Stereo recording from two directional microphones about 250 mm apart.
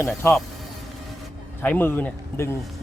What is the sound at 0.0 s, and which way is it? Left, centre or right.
Speech, centre.